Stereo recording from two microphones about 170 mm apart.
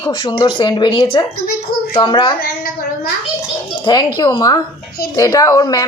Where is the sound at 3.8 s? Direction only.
25° left (ahead or behind).